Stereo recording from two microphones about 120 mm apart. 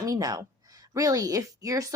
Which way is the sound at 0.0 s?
30° right (ahead or behind).